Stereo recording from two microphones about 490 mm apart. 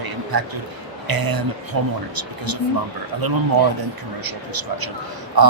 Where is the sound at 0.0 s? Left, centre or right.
Right.